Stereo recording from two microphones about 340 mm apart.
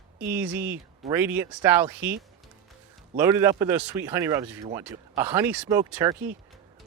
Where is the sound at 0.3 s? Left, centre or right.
Centre.